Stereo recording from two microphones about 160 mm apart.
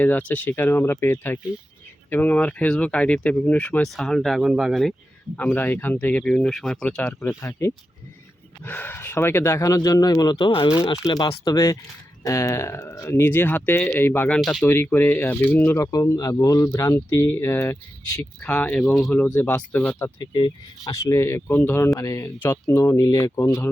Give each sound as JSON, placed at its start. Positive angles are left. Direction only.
{"t": 0.0, "sound": "speech", "side_deg": 10}
{"t": 5.4, "sound": "speech", "side_deg": 10}
{"t": 20.1, "sound": "speech", "side_deg": 25}